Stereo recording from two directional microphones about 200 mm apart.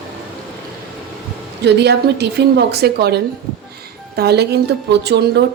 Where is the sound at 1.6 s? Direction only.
55° right (ahead or behind).